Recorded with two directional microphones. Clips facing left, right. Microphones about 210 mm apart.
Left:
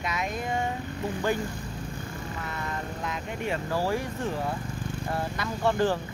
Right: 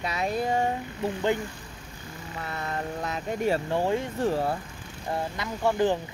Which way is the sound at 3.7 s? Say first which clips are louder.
Right 2 dB; 20° right (ahead or behind).